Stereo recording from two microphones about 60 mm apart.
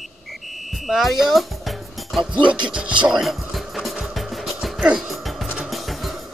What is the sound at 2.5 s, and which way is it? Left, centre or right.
Music, centre.